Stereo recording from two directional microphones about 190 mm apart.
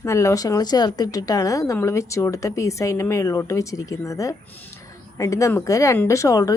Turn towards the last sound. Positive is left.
turn(degrees=15)  # may be behind; listen again after turning